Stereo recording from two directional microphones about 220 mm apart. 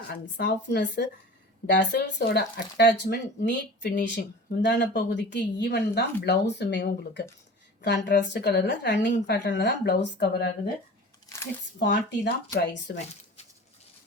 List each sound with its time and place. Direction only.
0.1 s speech: 50° left (ahead or behind)
3.5 s speech: 35° left (ahead or behind)
4.6 s a woman's voice: 50° left (ahead or behind)
11.8 s speech: 50° left (ahead or behind)